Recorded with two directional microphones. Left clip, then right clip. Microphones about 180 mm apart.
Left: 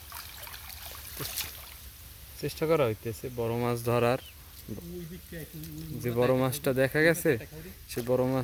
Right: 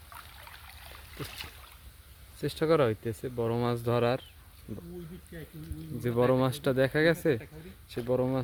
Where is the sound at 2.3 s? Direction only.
25° right (ahead or behind).